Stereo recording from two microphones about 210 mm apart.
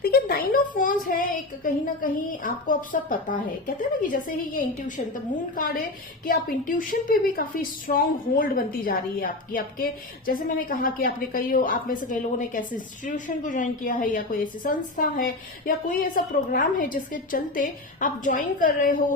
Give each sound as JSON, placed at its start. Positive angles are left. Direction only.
{"t": 0.0, "sound": "a woman's voice", "side_deg": 45}